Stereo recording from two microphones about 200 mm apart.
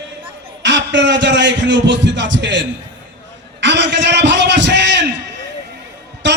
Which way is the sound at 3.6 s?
65° right (ahead or behind).